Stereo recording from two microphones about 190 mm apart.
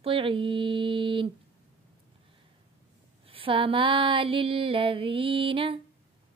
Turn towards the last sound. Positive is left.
turn(degrees=-25)  # may be behind; listen again after turning